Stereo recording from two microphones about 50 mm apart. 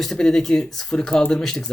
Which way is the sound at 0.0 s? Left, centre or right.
Centre.